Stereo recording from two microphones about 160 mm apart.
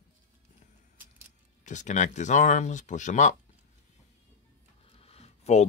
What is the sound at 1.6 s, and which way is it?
Speech, 50° left (ahead or behind).